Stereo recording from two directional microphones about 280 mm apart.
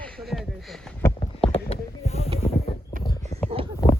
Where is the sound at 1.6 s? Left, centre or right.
Left.